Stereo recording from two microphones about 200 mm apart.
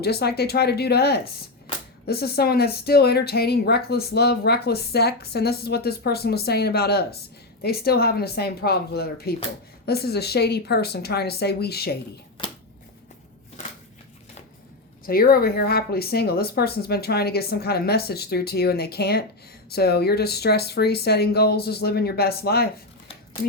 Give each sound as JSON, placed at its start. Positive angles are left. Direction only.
{"t": 0.0, "sound": "speech", "side_deg": 55}
{"t": 15.0, "sound": "speech", "side_deg": 50}